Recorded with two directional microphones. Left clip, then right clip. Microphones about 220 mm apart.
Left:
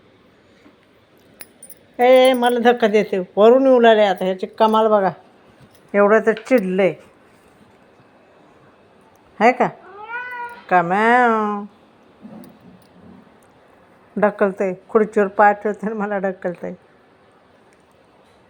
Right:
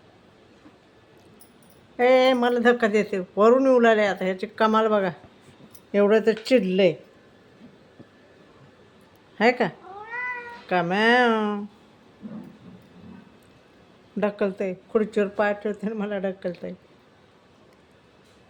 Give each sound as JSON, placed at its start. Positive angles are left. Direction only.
{"t": 2.0, "sound": "speech", "side_deg": 5}
{"t": 5.9, "sound": "speech", "side_deg": -15}
{"t": 10.7, "sound": "speech", "side_deg": -5}
{"t": 14.2, "sound": "speech", "side_deg": 0}